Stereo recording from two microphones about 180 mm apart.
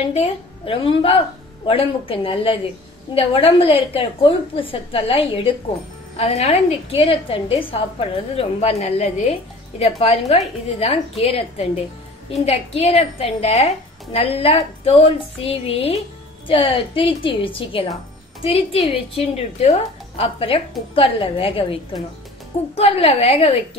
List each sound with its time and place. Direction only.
0.1 s a woman's voice: 30° left (ahead or behind)
22.8 s a woman's voice: 35° left (ahead or behind)